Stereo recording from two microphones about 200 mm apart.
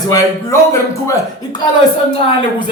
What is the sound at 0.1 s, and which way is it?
Speech, 15° left (ahead or behind).